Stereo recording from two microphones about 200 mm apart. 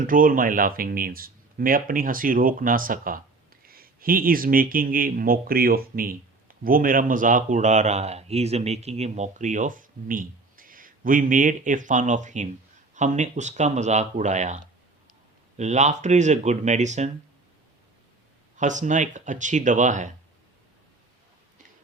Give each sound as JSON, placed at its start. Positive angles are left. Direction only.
{"t": 0.0, "sound": "speech", "side_deg": -45}
{"t": 18.5, "sound": "speech", "side_deg": -40}